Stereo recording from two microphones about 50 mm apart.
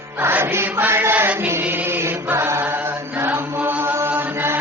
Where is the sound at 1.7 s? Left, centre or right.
Right.